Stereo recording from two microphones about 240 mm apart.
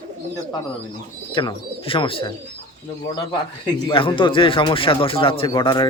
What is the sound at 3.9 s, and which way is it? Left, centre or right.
Speech, left.